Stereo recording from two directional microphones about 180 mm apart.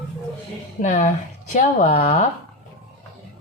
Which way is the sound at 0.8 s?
40° left (ahead or behind).